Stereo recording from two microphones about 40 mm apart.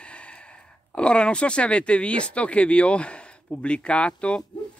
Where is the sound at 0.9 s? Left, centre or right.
Left.